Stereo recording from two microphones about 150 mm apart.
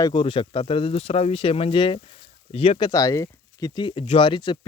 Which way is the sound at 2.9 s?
20° left (ahead or behind).